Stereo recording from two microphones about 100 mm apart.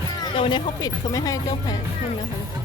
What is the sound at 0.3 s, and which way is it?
Speech, 60° left (ahead or behind).